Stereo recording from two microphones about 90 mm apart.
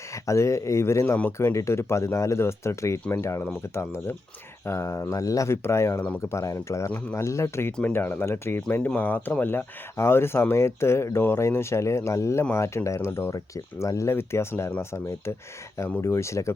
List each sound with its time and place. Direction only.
0.3 s speech: 35° left (ahead or behind)
6.9 s speech: 20° left (ahead or behind)
7.3 s speech: 35° left (ahead or behind)